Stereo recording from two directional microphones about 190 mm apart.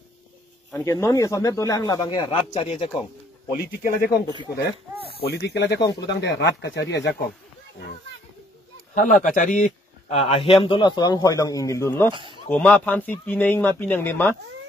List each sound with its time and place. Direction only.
0.8 s speech: 15° left (ahead or behind)
2.5 s speech: 35° left (ahead or behind)
3.5 s speech: 50° left (ahead or behind)
5.2 s speech: 60° left (ahead or behind)
5.8 s a man's voice: 20° left (ahead or behind)
6.2 s speech: 70° left (ahead or behind)
8.9 s speech: 45° left (ahead or behind)
10.1 s a man's voice: 30° left (ahead or behind); by 12.1 s 15° left (ahead or behind)
12.1 s speech: 25° right (ahead or behind)
12.4 s speech: 5° left (ahead or behind)